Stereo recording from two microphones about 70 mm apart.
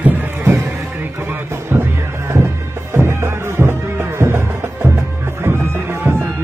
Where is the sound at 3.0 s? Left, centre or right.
Right.